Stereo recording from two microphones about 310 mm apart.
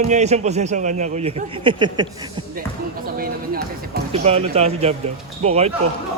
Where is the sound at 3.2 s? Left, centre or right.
Right.